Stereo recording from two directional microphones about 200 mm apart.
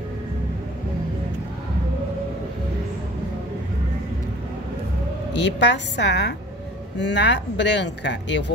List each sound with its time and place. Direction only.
5.3 s speech: 60° left (ahead or behind)